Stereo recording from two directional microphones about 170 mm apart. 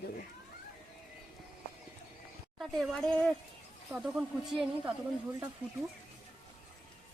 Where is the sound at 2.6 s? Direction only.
Centre (ahead or behind).